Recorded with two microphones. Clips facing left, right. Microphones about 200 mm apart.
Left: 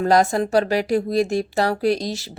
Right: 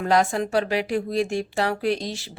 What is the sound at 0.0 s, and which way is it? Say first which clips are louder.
Speech: left 4 dB; 40° left (ahead or behind).